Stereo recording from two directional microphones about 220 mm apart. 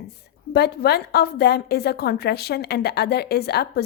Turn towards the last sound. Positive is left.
turn(degrees=45)  # may be behind; listen again after turning